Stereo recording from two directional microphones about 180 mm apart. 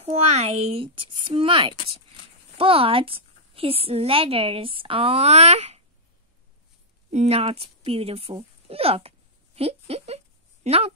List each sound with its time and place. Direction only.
0.0 s a woman's voice: 35° right (ahead or behind)
7.1 s a woman's voice: 35° right (ahead or behind)
9.6 s a sound: 35° right (ahead or behind)